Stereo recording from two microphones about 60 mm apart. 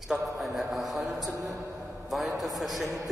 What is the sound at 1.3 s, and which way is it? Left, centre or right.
Speech, right.